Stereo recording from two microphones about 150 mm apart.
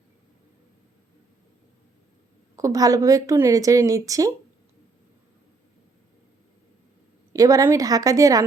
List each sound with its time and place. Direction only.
2.6 s a woman's voice: 20° right (ahead or behind)
7.3 s a woman's voice: 25° right (ahead or behind)